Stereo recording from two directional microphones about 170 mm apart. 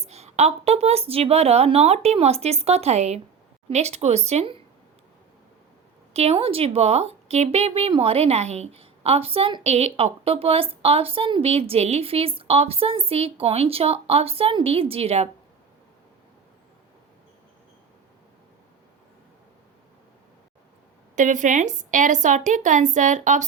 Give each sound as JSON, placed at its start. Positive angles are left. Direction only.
{"t": 0.0, "sound": "speech", "side_deg": -40}
{"t": 6.1, "sound": "speech", "side_deg": -35}
{"t": 21.2, "sound": "a woman's voice", "side_deg": -50}